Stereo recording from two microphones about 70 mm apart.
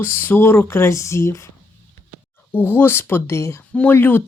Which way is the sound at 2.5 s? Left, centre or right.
Left.